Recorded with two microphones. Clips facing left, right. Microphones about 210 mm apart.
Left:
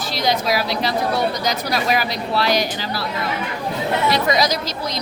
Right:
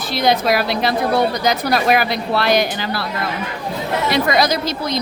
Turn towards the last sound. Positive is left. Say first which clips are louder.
# right 4 dB
turn(degrees=-55)  # may be behind; listen again after turning